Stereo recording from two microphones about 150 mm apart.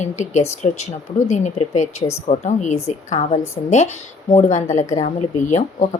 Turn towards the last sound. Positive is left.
turn(degrees=50)  # may be behind; listen again after turning